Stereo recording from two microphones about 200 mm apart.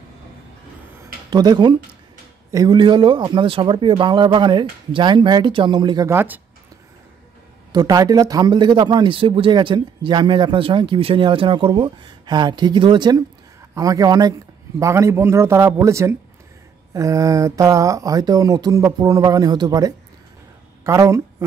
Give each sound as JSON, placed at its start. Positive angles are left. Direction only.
{"t": 1.3, "sound": "a man's voice", "side_deg": -20}
{"t": 7.7, "sound": "a man's voice", "side_deg": -20}